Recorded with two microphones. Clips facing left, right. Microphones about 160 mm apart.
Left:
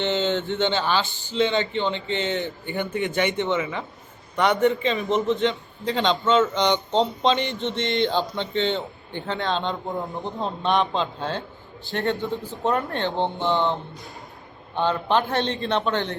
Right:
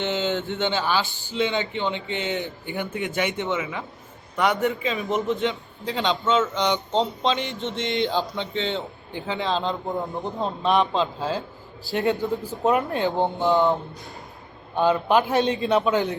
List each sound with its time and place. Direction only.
0.0 s a sound: 10° right (ahead or behind)
0.7 s a man's voice: 10° right (ahead or behind)
5.0 s a man's voice: 20° left (ahead or behind)
5.4 s a man's voice: 5° right (ahead or behind)
14.8 s a man's voice: 10° right (ahead or behind)